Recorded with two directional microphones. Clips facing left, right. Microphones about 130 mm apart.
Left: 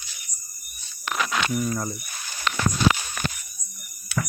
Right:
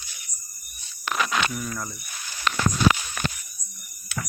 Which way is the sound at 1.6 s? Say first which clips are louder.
Left 6 dB; 30° left (ahead or behind).